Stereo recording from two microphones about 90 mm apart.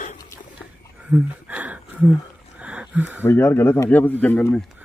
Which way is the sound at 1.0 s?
15° right (ahead or behind).